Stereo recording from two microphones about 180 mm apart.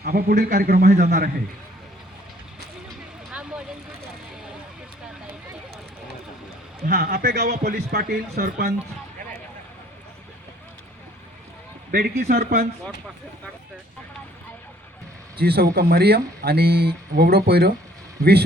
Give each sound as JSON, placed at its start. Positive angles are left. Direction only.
{"t": 0.0, "sound": "speech", "side_deg": -55}
{"t": 6.8, "sound": "speech", "side_deg": -55}
{"t": 11.9, "sound": "a man's voice", "side_deg": -55}
{"t": 15.4, "sound": "a man's voice", "side_deg": -60}